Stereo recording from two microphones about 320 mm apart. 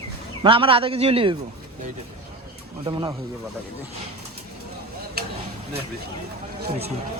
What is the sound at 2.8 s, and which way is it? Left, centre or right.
Speech, centre.